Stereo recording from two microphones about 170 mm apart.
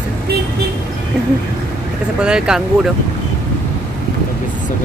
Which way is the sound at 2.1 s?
5° right (ahead or behind).